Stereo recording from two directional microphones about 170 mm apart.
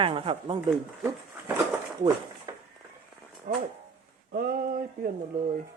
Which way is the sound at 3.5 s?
55° right (ahead or behind).